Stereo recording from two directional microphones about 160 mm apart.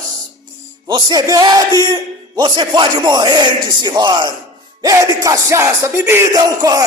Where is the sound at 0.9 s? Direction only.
30° right (ahead or behind).